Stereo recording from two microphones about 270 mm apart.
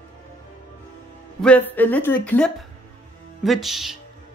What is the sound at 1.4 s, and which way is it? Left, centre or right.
Speech, centre.